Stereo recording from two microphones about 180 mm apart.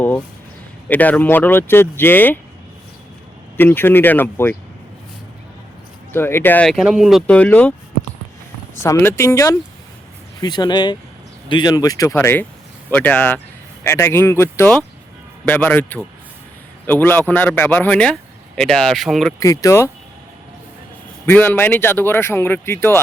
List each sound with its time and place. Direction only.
0.9 s speech: 10° left (ahead or behind)
3.6 s speech: 10° left (ahead or behind)
6.1 s speech: 15° left (ahead or behind)
8.8 s speech: 15° left (ahead or behind)
19.4 s speech: 15° left (ahead or behind)
21.2 s speech: 10° left (ahead or behind)